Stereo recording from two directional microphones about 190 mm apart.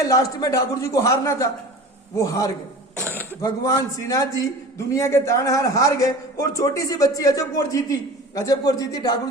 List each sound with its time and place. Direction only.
0.0 s a man's voice: 20° left (ahead or behind)